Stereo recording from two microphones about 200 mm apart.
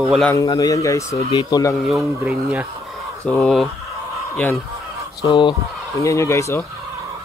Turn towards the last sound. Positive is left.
turn(degrees=15)  # may be behind; listen again after turning